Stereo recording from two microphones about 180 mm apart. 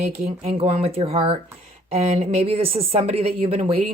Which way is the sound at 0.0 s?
35° right (ahead or behind).